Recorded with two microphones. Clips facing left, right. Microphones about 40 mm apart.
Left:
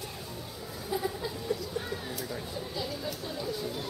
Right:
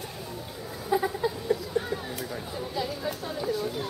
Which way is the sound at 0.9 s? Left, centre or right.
Right.